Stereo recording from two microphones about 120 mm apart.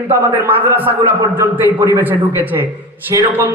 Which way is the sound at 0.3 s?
20° right (ahead or behind).